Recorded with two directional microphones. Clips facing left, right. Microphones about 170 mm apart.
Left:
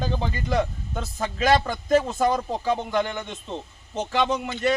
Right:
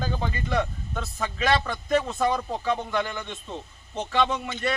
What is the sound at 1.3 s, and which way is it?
Speech, 40° left (ahead or behind).